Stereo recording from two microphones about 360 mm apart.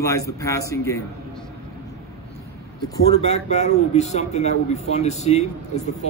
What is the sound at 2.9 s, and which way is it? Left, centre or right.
Speech, centre.